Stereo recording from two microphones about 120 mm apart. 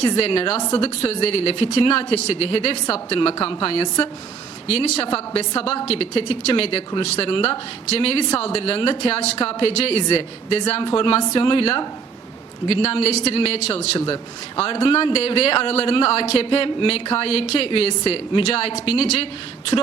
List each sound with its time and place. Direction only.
0.0 s a woman's voice: 50° left (ahead or behind)